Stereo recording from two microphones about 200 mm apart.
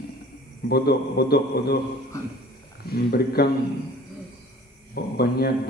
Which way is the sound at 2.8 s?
50° left (ahead or behind).